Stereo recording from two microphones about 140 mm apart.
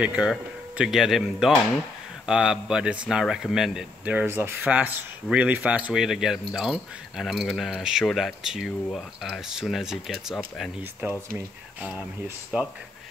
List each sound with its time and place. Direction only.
0.0 s speech: 5° right (ahead or behind)
11.0 s speech: 15° right (ahead or behind)
12.5 s speech: 10° right (ahead or behind)